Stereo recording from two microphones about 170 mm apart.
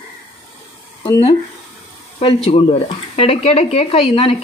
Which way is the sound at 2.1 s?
35° left (ahead or behind).